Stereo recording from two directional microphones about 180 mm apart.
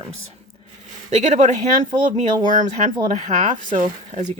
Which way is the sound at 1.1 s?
40° right (ahead or behind).